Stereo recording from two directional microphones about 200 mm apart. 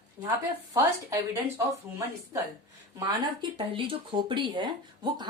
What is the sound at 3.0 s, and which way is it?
Speech, 20° right (ahead or behind).